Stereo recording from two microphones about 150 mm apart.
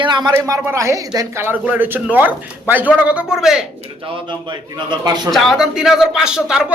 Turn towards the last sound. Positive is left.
turn(degrees=-5)  # may be behind; listen again after turning